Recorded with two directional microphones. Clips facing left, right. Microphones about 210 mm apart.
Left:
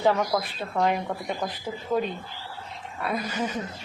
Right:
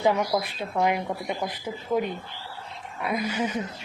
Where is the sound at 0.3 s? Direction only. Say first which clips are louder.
Even; 15° right (ahead or behind).